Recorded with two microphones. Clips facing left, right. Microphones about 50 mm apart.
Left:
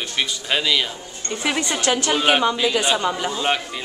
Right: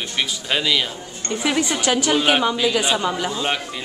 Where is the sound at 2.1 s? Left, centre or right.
Centre.